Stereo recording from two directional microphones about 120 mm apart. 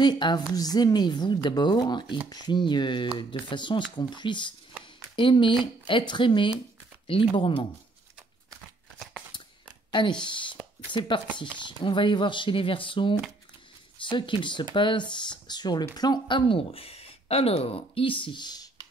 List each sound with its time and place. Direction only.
0.0 s speech: 40° left (ahead or behind)
9.8 s a sound: 40° left (ahead or behind)
10.2 s speech: 40° left (ahead or behind)